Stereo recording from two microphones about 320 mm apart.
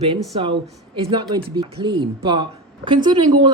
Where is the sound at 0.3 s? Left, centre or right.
Centre.